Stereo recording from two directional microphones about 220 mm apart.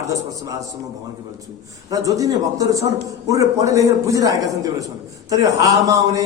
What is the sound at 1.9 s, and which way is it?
A man's voice, 15° right (ahead or behind).